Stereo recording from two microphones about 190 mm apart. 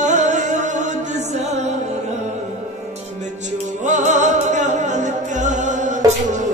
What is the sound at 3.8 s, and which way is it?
Music, 40° right (ahead or behind).